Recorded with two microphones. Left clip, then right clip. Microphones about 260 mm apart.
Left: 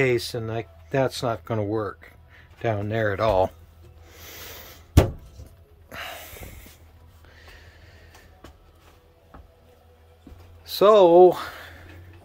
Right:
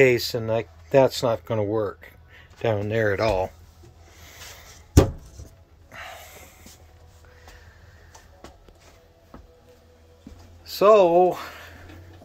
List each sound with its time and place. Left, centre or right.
0.0 s speech: centre
4.2 s a sound: left
5.9 s snort: left
10.6 s speech: centre